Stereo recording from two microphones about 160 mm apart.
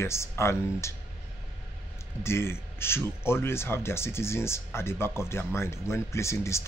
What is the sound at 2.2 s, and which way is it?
Speech, 15° left (ahead or behind).